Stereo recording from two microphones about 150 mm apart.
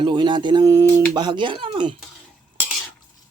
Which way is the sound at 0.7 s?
20° right (ahead or behind).